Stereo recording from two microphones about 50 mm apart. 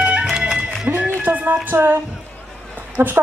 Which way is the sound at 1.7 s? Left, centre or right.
Right.